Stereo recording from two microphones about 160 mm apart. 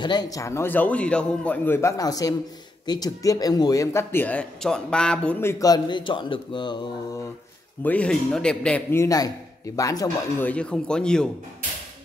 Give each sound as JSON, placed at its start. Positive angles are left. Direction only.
{"t": 0.0, "sound": "a man's voice", "side_deg": 25}
{"t": 7.8, "sound": "a man's voice", "side_deg": 10}
{"t": 10.4, "sound": "speech", "side_deg": 5}